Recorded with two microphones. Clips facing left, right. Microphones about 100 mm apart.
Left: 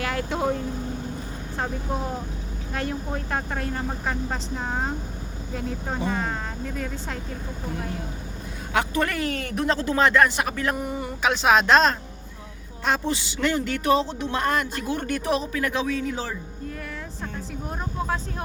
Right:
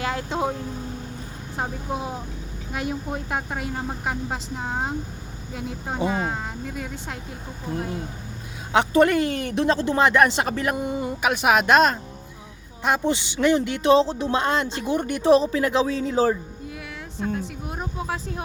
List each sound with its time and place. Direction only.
0.0 s speech: 20° right (ahead or behind)
1.5 s speech: 15° right (ahead or behind)
8.7 s speech: 25° right (ahead or behind)
15.2 s speech: 30° right (ahead or behind)
17.7 s speech: 10° right (ahead or behind)